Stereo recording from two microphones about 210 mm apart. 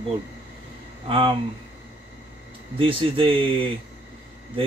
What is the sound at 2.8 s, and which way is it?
Speech, 25° right (ahead or behind).